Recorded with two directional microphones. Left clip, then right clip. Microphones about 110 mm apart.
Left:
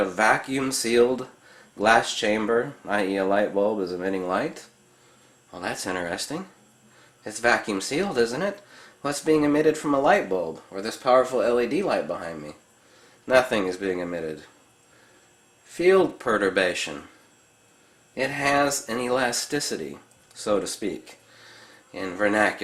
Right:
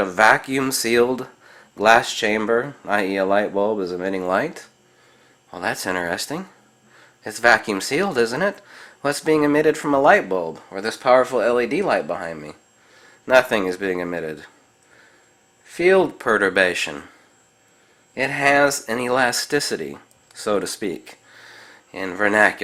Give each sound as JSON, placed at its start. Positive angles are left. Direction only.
{"t": 0.0, "sound": "speech", "side_deg": -45}
{"t": 15.6, "sound": "speech", "side_deg": -40}
{"t": 18.1, "sound": "speech", "side_deg": -40}